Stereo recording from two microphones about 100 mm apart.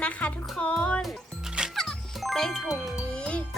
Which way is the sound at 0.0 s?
10° left (ahead or behind).